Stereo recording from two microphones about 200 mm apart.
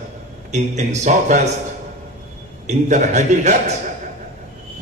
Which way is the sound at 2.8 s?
35° right (ahead or behind).